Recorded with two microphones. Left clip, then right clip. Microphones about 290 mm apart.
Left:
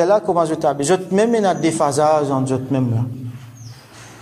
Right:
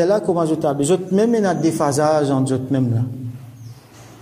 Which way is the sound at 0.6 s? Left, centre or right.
Left.